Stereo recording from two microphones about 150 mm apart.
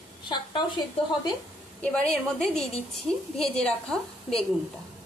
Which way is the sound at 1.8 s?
5° left (ahead or behind).